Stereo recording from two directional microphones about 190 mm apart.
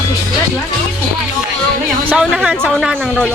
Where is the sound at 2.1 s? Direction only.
5° right (ahead or behind).